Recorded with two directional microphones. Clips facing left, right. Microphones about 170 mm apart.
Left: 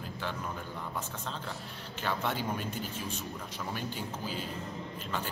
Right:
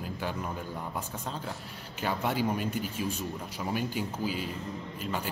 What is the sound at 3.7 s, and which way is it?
Speech, 10° right (ahead or behind).